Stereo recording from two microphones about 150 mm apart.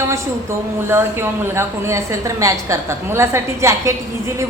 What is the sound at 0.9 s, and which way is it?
A woman's voice, 15° right (ahead or behind).